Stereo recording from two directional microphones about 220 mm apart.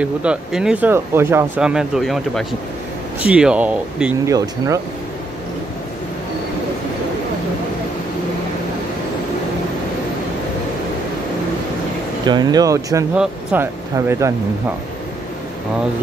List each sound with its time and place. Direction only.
0.0 s speech: 5° right (ahead or behind)
12.3 s speech: 20° right (ahead or behind)